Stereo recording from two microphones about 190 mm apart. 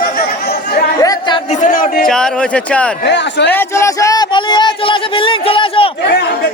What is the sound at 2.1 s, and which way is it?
Speech, 5° left (ahead or behind).